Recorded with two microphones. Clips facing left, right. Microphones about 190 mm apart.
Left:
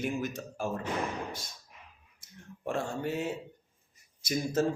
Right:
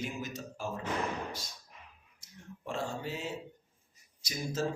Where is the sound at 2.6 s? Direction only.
55° left (ahead or behind).